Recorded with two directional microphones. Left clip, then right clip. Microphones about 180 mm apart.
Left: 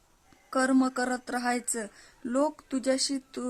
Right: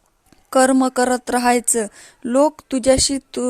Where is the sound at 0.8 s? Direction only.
40° right (ahead or behind).